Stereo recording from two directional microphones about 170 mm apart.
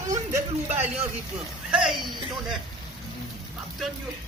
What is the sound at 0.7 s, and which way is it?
Speech, 40° right (ahead or behind).